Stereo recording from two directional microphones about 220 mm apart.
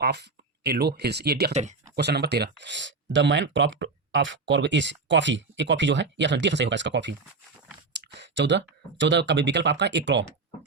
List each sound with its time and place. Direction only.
0.0 s speech: 50° right (ahead or behind)
1.5 s speech: 30° right (ahead or behind)
2.0 s speech: 50° right (ahead or behind)